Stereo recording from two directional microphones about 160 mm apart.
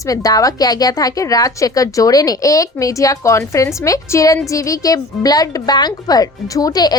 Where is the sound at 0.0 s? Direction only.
20° left (ahead or behind).